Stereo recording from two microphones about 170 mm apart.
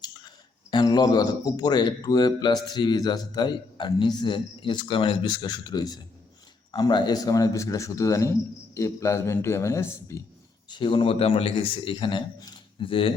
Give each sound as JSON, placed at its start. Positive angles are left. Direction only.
{"t": 0.7, "sound": "a man's voice", "side_deg": 25}
{"t": 10.7, "sound": "a man's voice", "side_deg": 30}